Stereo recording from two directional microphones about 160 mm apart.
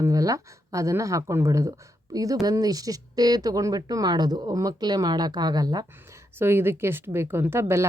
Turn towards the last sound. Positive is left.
turn(degrees=-15)  # may be behind; listen again after turning